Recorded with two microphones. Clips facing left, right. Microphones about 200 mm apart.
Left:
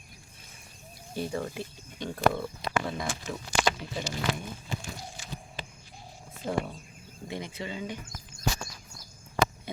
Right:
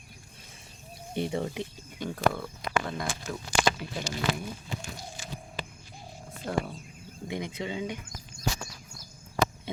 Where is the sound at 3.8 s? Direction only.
10° right (ahead or behind).